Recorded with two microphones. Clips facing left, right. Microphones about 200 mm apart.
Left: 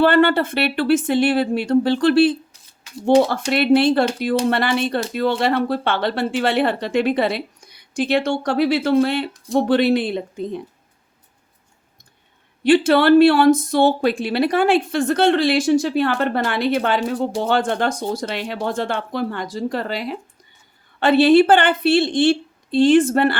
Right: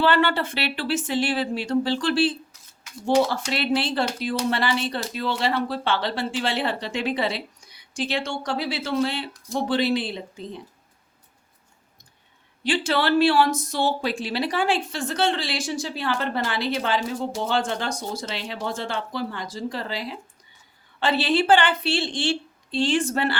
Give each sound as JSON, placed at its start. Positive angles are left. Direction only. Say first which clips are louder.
{"t": 0.0, "sound": "speech", "louder": "left 6 dB", "side_deg": 50}
{"t": 12.6, "sound": "speech", "louder": "left 10 dB", "side_deg": 55}